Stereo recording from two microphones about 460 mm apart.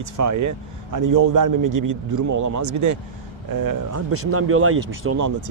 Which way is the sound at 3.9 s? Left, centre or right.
Right.